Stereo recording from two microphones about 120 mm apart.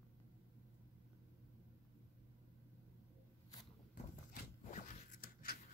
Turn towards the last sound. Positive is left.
turn(degrees=90)